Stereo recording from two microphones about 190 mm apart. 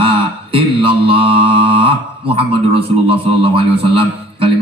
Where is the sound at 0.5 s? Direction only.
30° right (ahead or behind).